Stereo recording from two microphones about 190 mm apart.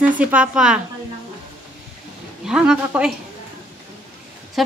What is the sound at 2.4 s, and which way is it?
Speech, 5° right (ahead or behind).